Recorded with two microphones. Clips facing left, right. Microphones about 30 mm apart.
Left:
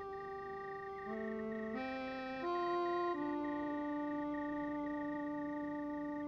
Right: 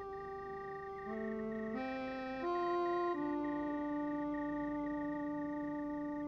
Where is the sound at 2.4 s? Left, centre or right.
Left.